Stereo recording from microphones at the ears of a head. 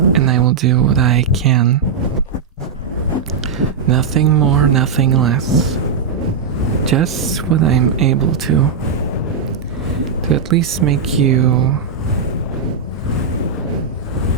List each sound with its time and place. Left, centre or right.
0.0 s speech: right
3.8 s speech: right
7.4 s speech: right
10.2 s speech: right